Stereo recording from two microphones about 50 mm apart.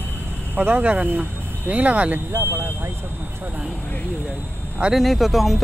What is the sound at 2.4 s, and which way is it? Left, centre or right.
Speech, right.